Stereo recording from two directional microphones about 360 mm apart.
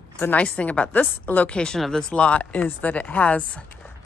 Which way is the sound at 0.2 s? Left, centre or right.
Centre.